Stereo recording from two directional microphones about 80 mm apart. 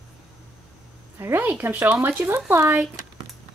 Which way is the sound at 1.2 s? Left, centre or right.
Right.